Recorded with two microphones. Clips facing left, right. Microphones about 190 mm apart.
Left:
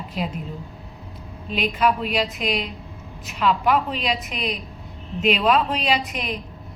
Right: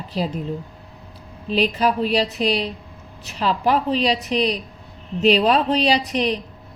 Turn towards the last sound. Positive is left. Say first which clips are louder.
# right 5 dB
turn(degrees=-35)  # may be behind; listen again after turning